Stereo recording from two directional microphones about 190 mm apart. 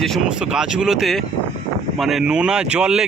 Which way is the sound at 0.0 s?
Centre (ahead or behind).